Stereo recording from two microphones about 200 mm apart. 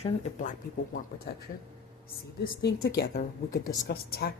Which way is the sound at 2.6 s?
50° left (ahead or behind).